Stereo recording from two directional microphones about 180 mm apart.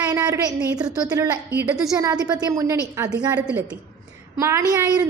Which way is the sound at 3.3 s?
10° right (ahead or behind).